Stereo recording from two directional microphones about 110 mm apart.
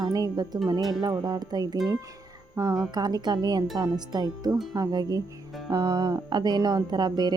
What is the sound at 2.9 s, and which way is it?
Speech, 40° right (ahead or behind).